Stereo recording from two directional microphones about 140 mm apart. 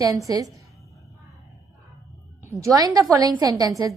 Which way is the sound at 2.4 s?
20° right (ahead or behind).